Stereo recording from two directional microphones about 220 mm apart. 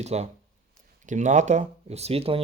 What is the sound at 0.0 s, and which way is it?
Speech, 30° right (ahead or behind).